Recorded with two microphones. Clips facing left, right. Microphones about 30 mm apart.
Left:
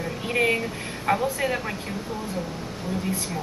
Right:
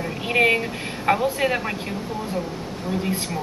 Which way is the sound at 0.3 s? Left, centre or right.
Right.